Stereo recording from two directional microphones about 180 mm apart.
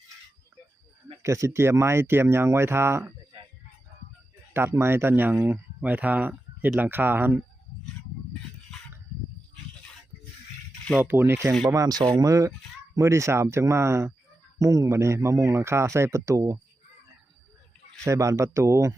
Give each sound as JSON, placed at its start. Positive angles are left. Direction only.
{"t": 1.2, "sound": "speech", "side_deg": -15}
{"t": 4.5, "sound": "speech", "side_deg": -15}
{"t": 10.9, "sound": "speech", "side_deg": -10}
{"t": 18.0, "sound": "speech", "side_deg": -15}